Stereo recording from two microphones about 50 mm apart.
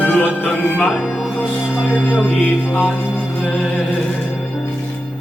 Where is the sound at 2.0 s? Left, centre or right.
Left.